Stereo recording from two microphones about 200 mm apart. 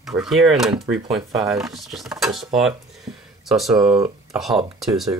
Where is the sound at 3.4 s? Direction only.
Centre (ahead or behind).